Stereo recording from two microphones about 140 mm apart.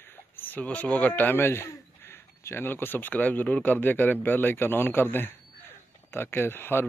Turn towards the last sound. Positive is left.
turn(degrees=15)  # may be behind; listen again after turning